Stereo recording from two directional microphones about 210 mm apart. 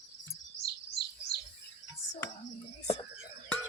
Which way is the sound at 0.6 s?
55° left (ahead or behind).